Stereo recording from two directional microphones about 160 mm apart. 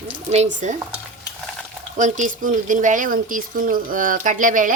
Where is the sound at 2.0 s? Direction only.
55° right (ahead or behind).